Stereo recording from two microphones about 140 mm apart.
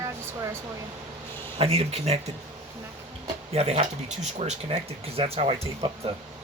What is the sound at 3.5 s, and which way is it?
Speech, 50° right (ahead or behind).